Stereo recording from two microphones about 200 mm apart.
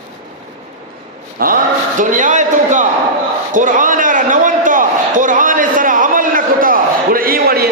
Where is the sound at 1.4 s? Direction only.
45° right (ahead or behind).